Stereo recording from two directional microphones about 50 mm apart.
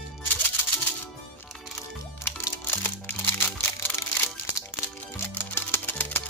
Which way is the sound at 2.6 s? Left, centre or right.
Left.